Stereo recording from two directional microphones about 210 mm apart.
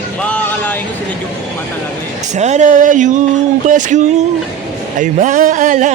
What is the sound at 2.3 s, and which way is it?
Speech, 35° right (ahead or behind).